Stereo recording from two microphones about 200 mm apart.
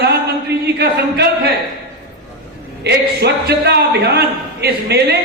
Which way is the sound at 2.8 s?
55° right (ahead or behind).